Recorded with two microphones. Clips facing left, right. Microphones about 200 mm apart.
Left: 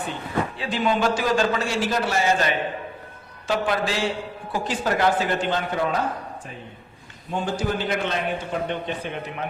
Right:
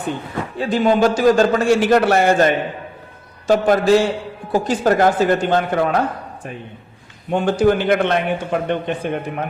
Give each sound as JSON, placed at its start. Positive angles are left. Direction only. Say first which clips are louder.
{"t": 0.5, "sound": "a man's voice", "louder": "right 11 dB", "side_deg": -45}
{"t": 7.3, "sound": "a man's voice", "louder": "right 10 dB", "side_deg": -70}